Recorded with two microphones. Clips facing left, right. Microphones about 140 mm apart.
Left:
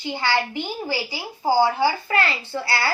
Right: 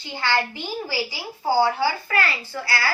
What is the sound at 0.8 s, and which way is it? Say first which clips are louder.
A woman's voice: left 1 dB; 20° left (ahead or behind).